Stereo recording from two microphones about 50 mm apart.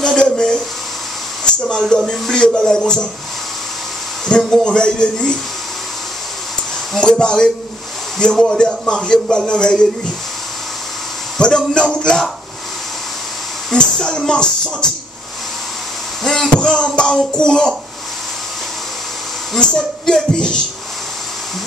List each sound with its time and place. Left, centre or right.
0.0 s a sound: centre
1.9 s speech: centre
4.4 s speech: centre
7.0 s speech: centre
11.3 s speech: centre
13.7 s speech: centre
16.3 s a sound: centre
19.6 s speech: centre